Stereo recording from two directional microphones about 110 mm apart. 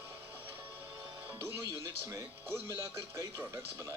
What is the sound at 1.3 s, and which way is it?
Speech, 25° right (ahead or behind).